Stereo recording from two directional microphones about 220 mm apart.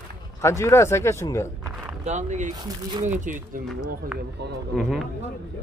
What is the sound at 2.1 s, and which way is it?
Speech, 35° right (ahead or behind).